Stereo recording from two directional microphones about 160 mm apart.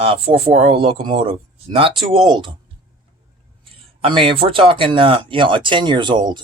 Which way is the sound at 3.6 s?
35° right (ahead or behind).